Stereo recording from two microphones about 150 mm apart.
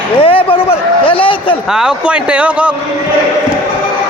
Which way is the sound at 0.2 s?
35° left (ahead or behind).